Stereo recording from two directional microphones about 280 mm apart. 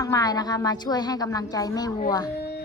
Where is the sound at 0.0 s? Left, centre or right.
Centre.